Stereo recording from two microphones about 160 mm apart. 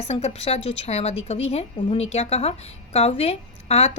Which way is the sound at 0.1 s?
40° left (ahead or behind).